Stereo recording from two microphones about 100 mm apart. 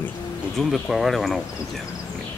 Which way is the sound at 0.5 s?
Centre (ahead or behind).